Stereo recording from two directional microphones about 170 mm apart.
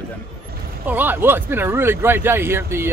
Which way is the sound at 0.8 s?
10° right (ahead or behind).